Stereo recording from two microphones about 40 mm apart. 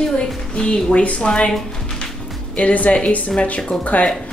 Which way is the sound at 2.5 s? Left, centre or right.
Left.